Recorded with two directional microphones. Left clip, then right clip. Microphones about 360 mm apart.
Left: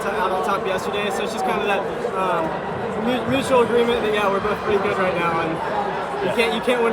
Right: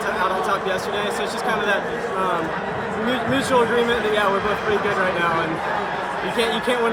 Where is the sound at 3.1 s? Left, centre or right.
Centre.